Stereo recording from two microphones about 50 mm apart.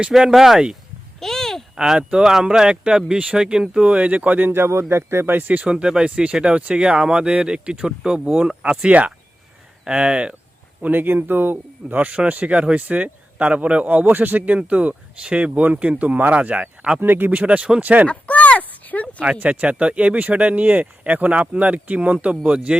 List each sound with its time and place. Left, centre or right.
0.1 s speech: centre
1.2 s a sound: centre
1.7 s a man's voice: centre; by 4.5 s right
4.5 s speech: right
5.7 s a man's voice: centre
8.9 s a man's voice: right
10.8 s a man's voice: right
17.0 s speech: right
17.3 s a man's voice: right
18.1 s a sound: left
19.2 s a man's voice: right